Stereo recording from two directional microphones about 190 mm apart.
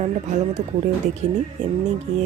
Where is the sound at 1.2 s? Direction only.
40° right (ahead or behind).